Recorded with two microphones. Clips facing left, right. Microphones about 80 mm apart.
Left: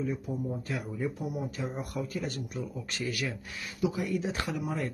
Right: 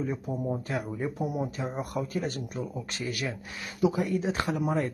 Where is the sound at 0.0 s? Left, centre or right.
Right.